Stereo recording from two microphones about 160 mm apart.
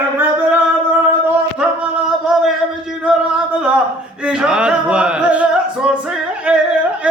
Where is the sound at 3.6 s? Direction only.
5° right (ahead or behind).